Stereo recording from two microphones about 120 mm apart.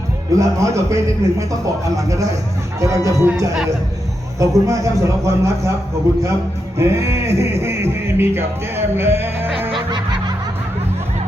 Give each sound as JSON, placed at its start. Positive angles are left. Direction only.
{"t": 0.3, "sound": "speech", "side_deg": -25}
{"t": 4.4, "sound": "speech", "side_deg": -25}
{"t": 6.7, "sound": "speech", "side_deg": -25}
{"t": 9.7, "sound": "music", "side_deg": -40}